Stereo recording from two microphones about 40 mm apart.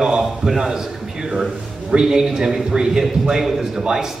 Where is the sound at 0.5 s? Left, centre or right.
Centre.